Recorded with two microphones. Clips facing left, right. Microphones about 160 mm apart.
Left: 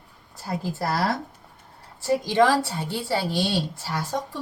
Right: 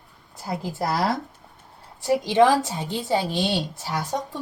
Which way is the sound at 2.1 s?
15° right (ahead or behind).